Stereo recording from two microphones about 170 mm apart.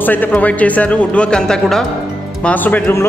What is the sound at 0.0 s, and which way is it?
A man's voice, 10° left (ahead or behind).